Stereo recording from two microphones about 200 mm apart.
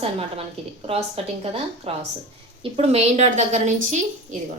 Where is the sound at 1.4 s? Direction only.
30° right (ahead or behind).